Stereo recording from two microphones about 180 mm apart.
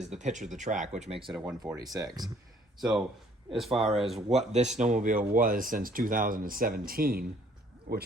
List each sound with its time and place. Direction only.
0.0 s speech: 40° right (ahead or behind)
1.3 s speech: 5° right (ahead or behind)
1.7 s speech: 20° right (ahead or behind)
3.6 s speech: centre (ahead or behind)
4.3 s speech: 35° right (ahead or behind); by 8.0 s 55° right (ahead or behind)